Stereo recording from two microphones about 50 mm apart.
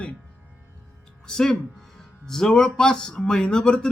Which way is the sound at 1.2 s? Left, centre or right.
Centre.